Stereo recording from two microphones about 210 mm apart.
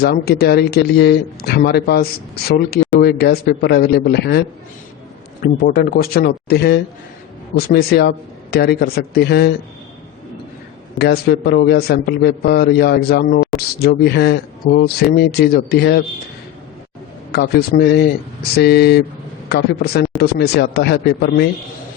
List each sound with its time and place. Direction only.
0.0 s a man's voice: 50° left (ahead or behind)
10.9 s a man's voice: 50° left (ahead or behind)
17.3 s a man's voice: 50° left (ahead or behind)